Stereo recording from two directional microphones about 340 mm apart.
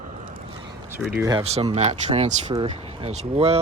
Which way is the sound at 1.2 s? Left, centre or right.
Centre.